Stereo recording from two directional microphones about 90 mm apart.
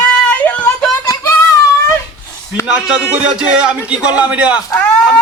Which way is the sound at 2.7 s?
10° right (ahead or behind).